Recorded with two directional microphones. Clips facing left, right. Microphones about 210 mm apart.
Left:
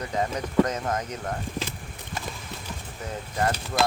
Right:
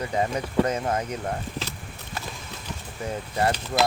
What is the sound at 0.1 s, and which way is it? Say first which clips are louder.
Speech: right 2 dB; 10° right (ahead or behind).